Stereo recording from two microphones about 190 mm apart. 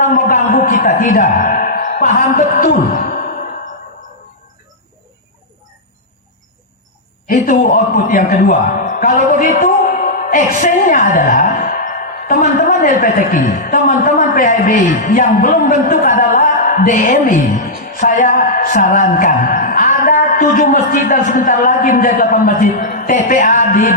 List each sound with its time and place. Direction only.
0.0 s a man's voice: 40° left (ahead or behind)
7.3 s a man's voice: 40° left (ahead or behind)